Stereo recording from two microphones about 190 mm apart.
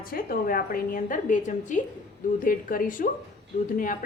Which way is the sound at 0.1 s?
50° left (ahead or behind).